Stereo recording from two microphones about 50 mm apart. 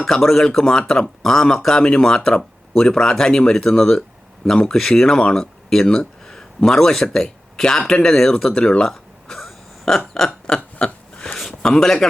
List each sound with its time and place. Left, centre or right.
0.0 s speech: centre
10.2 s burping: centre
11.3 s speech: centre